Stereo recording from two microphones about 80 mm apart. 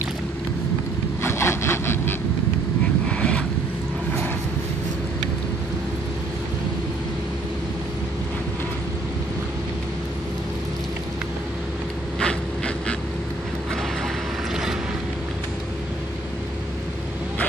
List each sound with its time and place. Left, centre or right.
1.2 s wood: left
3.1 s vehicle: centre
12.2 s vehicle: centre
14.5 s boat: centre